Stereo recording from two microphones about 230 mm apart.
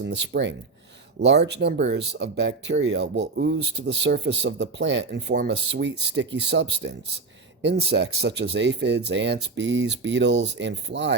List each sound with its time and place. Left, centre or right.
0.0 s speech: right